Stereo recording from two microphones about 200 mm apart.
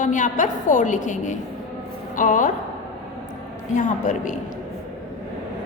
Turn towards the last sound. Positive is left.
turn(degrees=40)  # may be behind; listen again after turning